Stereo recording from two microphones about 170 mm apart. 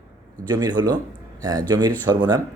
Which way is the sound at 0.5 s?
25° right (ahead or behind).